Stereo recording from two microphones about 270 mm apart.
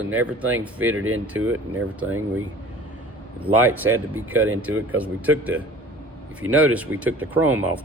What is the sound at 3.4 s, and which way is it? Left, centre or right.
Speech, centre.